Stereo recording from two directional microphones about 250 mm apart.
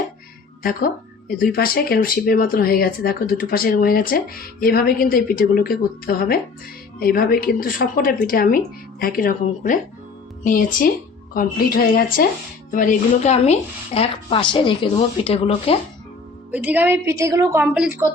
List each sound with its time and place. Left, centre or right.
0.6 s speech: left
16.5 s a woman's voice: centre